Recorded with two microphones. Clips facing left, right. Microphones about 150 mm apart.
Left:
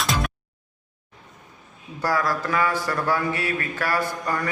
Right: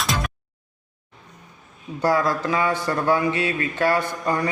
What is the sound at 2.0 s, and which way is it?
Speech, 25° right (ahead or behind).